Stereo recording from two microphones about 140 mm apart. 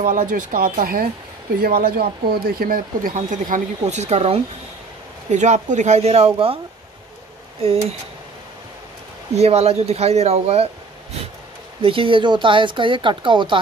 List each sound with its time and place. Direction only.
0.0 s speech: 75° right (ahead or behind); by 6.6 s 40° right (ahead or behind)
9.3 s speech: 50° right (ahead or behind)
11.8 s speech: 40° right (ahead or behind)